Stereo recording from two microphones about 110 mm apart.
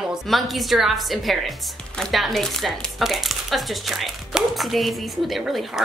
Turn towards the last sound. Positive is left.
turn(degrees=0)  # may be behind; listen again after turning